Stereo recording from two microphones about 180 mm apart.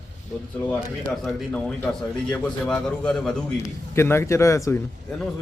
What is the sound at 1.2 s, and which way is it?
A man's voice, 5° left (ahead or behind).